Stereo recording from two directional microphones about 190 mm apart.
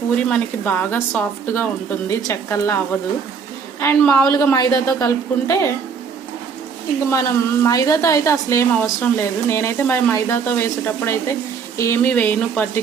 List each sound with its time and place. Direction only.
0.2 s a woman's voice: 5° left (ahead or behind)
7.1 s a woman's voice: 15° left (ahead or behind)